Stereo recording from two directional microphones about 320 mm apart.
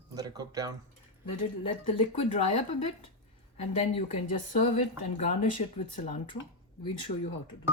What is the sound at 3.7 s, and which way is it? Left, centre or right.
Speech, left.